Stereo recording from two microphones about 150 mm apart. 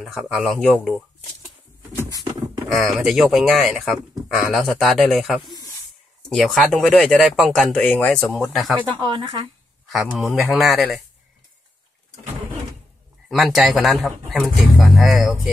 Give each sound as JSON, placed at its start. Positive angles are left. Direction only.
{"t": 0.0, "sound": "speech", "side_deg": 0}
{"t": 2.7, "sound": "speech", "side_deg": 0}
{"t": 7.7, "sound": "speech", "side_deg": 10}
{"t": 8.3, "sound": "speech", "side_deg": 0}
{"t": 8.8, "sound": "speech", "side_deg": -30}
{"t": 9.8, "sound": "speech", "side_deg": 0}
{"t": 13.3, "sound": "speech", "side_deg": 0}